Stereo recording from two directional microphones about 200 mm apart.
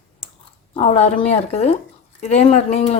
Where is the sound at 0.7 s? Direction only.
30° left (ahead or behind).